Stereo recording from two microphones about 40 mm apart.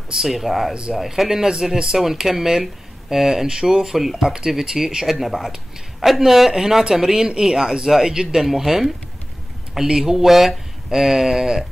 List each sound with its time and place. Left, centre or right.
0.2 s speech: centre